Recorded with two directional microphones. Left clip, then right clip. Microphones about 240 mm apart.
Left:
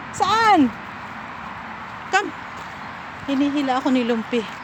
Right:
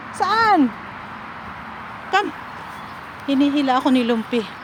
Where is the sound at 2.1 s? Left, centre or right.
Centre.